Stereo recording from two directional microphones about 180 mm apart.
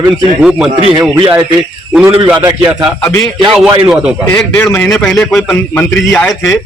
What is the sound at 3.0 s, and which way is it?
Speech, 15° left (ahead or behind).